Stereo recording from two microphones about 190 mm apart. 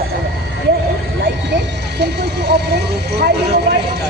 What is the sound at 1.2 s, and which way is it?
Speech, 60° right (ahead or behind).